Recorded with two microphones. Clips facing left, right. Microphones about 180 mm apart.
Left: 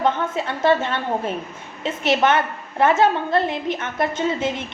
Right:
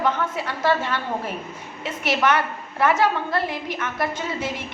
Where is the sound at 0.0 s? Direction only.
25° left (ahead or behind).